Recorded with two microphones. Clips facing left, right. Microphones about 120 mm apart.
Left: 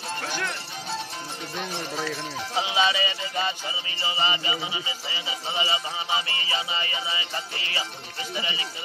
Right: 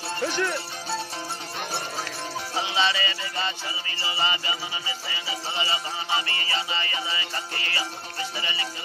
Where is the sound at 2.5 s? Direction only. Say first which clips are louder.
Left 2 dB; 15° left (ahead or behind).